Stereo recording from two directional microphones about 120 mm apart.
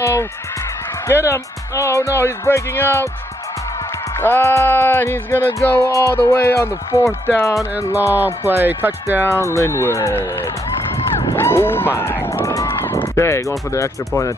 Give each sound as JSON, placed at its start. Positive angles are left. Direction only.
{"t": 0.0, "sound": "music", "side_deg": 25}
{"t": 4.2, "sound": "music", "side_deg": 20}
{"t": 8.5, "sound": "speech", "side_deg": -15}
{"t": 9.3, "sound": "music", "side_deg": 25}
{"t": 11.3, "sound": "speech", "side_deg": 20}
{"t": 13.7, "sound": "music", "side_deg": 25}